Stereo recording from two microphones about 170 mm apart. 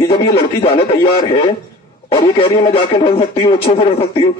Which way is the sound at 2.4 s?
30° left (ahead or behind).